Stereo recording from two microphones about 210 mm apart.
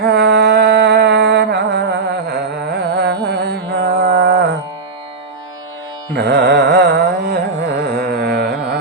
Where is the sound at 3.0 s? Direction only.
50° right (ahead or behind).